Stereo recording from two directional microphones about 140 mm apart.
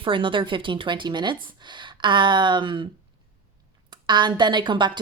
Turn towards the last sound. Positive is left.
turn(degrees=-35)  # may be behind; listen again after turning